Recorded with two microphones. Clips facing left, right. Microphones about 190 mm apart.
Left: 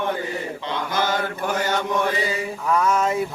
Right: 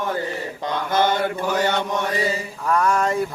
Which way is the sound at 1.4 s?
55° left (ahead or behind).